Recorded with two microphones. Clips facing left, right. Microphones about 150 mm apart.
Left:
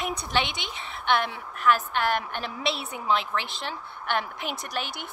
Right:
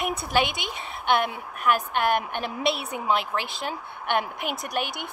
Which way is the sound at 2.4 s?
55° right (ahead or behind).